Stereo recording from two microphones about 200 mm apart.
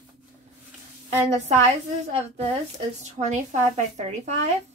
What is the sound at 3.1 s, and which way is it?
Speech, 35° right (ahead or behind).